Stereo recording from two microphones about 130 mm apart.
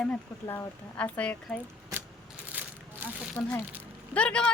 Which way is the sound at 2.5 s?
15° right (ahead or behind).